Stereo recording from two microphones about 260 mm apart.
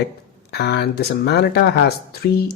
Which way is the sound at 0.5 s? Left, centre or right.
Left.